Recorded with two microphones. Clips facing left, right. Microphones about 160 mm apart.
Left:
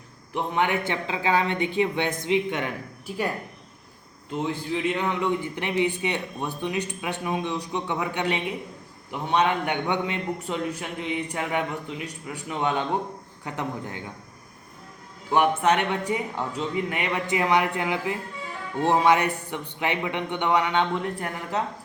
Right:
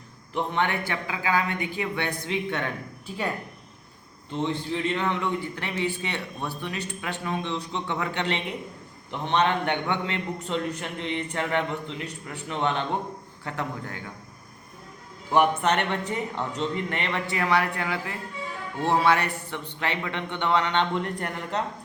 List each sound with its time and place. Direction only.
0.3 s a woman's voice: 10° left (ahead or behind)
4.3 s a man's voice: 10° left (ahead or behind)
15.3 s a man's voice: 5° left (ahead or behind)